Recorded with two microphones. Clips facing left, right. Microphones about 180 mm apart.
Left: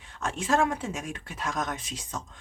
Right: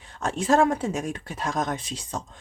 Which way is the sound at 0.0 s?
35° right (ahead or behind).